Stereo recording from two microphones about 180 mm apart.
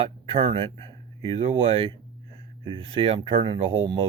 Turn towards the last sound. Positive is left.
turn(degrees=-30)  # may be behind; listen again after turning